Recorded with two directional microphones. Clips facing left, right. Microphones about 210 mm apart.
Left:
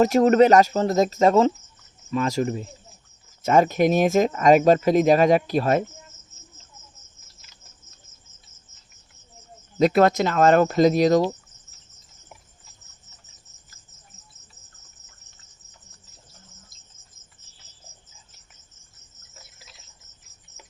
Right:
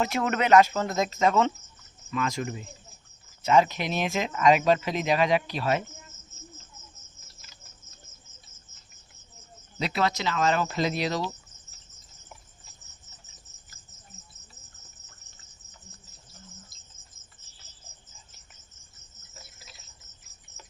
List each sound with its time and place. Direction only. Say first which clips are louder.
0.0 s speech: left 11 dB; 40° left (ahead or behind)
9.7 s speech: left 11 dB; 45° left (ahead or behind)